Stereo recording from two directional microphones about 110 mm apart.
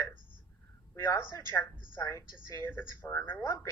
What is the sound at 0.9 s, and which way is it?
Speech, 20° left (ahead or behind).